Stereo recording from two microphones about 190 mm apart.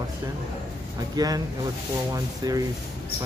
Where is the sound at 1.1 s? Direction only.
20° right (ahead or behind).